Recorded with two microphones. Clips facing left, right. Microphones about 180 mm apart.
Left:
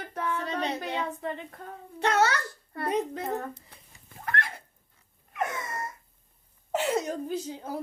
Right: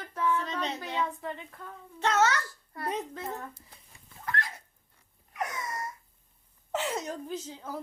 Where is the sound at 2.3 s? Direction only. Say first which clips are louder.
Even; 60° left (ahead or behind).